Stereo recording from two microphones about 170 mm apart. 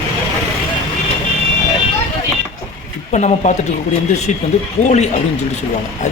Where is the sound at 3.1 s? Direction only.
45° left (ahead or behind).